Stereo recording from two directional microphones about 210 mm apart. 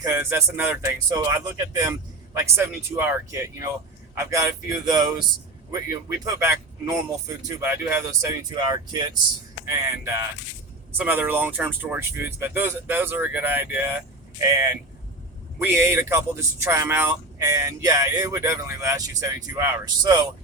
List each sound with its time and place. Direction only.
0.0 s speech: 15° right (ahead or behind)